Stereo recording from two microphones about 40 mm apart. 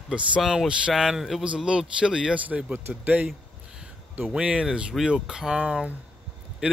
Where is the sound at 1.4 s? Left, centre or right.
Right.